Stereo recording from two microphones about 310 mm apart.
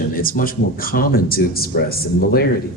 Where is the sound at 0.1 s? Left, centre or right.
Left.